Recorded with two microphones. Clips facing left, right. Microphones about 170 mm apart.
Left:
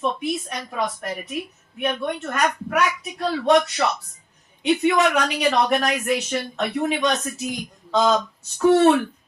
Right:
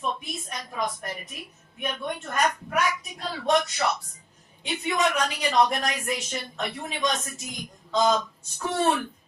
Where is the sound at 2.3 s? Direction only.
75° left (ahead or behind).